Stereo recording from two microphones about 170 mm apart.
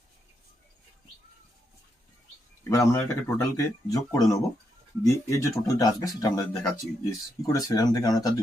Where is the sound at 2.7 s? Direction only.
15° left (ahead or behind).